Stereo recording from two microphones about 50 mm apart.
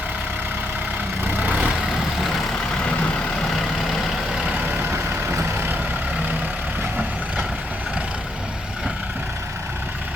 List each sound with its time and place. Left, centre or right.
1.3 s vehicle: right
4.8 s vehicle: right